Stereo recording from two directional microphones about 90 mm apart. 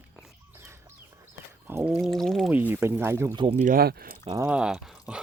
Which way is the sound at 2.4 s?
20° right (ahead or behind).